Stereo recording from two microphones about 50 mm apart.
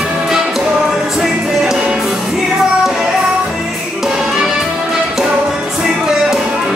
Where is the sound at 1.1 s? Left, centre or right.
Centre.